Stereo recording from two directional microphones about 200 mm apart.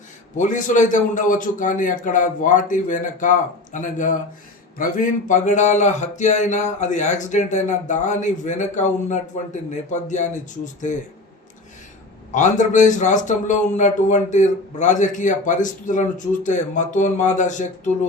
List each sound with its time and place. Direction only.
0.3 s speech: 40° left (ahead or behind)
12.3 s speech: 40° left (ahead or behind)